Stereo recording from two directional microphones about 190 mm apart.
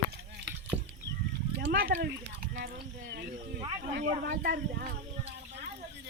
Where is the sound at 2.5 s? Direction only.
55° right (ahead or behind).